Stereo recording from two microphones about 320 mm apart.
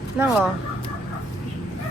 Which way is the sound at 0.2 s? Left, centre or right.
Centre.